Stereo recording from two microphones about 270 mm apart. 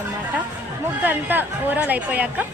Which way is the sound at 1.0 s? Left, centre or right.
Centre.